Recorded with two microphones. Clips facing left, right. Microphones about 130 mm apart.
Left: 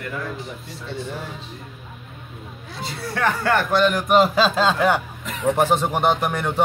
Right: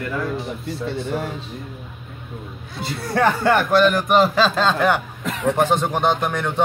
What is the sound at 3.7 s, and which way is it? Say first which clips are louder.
A man's voice: even; centre (ahead or behind).